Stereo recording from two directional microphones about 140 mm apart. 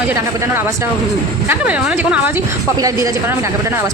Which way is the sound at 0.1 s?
15° right (ahead or behind).